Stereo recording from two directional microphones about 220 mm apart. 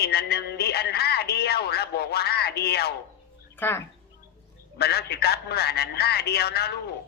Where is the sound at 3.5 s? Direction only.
10° left (ahead or behind).